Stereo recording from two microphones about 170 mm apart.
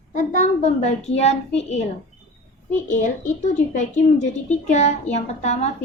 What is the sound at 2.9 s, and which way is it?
A woman's voice, 45° left (ahead or behind).